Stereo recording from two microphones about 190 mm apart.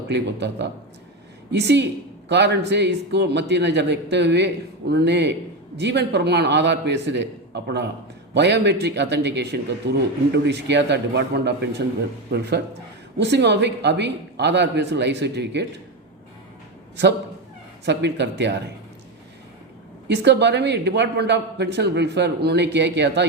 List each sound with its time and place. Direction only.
0.1 s a man's voice: 65° right (ahead or behind)
17.8 s a man's voice: 65° right (ahead or behind)
20.1 s a man's voice: 65° right (ahead or behind)